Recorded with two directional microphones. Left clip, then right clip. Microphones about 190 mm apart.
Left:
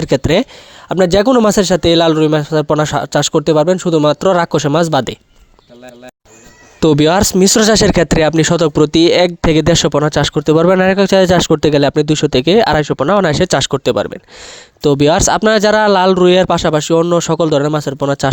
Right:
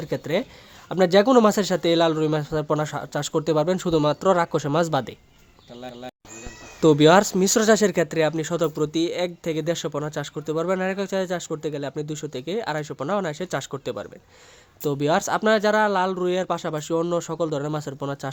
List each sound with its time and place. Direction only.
0.0 s speech: 45° left (ahead or behind)
6.7 s speech: 40° left (ahead or behind)